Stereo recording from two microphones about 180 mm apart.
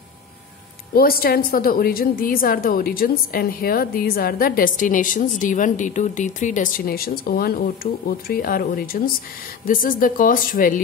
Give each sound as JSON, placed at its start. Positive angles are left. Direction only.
{"t": 0.9, "sound": "a woman's voice", "side_deg": 55}